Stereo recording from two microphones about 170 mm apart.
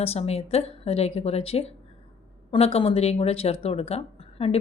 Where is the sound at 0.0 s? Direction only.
40° left (ahead or behind).